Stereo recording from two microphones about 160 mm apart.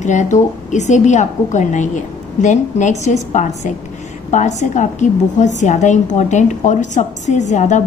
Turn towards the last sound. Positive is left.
turn(degrees=50)  # may be behind; listen again after turning